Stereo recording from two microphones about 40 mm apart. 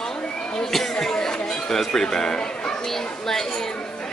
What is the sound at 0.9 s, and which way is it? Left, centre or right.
Music, centre.